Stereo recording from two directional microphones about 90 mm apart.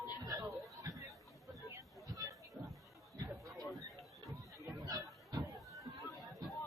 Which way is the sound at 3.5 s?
Centre (ahead or behind).